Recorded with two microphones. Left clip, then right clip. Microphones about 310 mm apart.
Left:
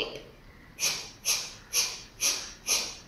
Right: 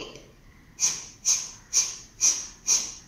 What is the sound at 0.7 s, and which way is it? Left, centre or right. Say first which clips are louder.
Snort: right 2 dB; centre.